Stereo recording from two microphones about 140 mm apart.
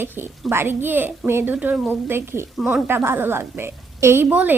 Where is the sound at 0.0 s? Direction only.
15° right (ahead or behind).